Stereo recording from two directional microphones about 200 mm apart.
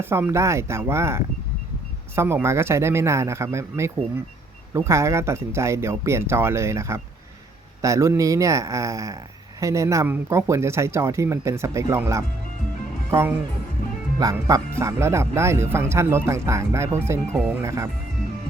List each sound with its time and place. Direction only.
0.0 s speech: 10° right (ahead or behind)